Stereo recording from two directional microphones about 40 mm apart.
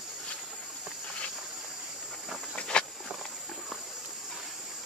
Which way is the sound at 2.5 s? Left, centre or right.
Left.